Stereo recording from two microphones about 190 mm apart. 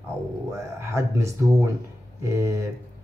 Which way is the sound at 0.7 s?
15° right (ahead or behind).